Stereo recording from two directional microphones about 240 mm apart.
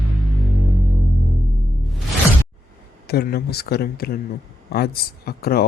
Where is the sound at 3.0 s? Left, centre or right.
Left.